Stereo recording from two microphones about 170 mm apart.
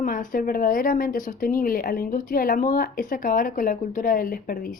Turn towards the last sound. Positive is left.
turn(degrees=55)  # may be behind; listen again after turning